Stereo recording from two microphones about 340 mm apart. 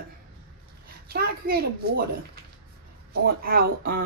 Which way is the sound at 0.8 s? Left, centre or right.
Right.